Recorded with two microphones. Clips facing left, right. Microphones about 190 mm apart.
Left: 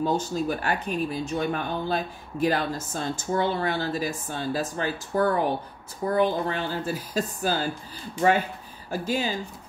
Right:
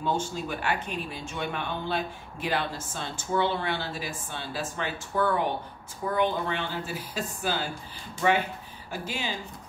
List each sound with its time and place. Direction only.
0.0 s speech: 40° left (ahead or behind)
9.0 s speech: 40° left (ahead or behind)